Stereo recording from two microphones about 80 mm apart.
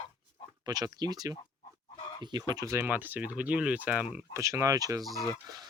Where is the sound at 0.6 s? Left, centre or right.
Right.